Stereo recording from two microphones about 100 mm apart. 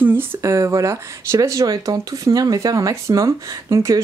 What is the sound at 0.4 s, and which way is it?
Speech, 30° right (ahead or behind).